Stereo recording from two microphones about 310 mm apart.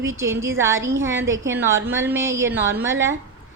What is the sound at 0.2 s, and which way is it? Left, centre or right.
Speech, centre.